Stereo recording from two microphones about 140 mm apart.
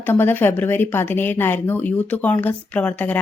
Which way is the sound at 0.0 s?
15° left (ahead or behind).